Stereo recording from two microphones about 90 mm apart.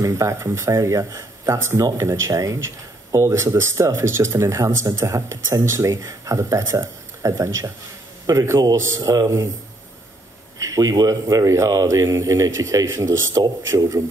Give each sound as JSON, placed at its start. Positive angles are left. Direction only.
{"t": 0.0, "sound": "speech", "side_deg": -35}
{"t": 10.6, "sound": "speech", "side_deg": -40}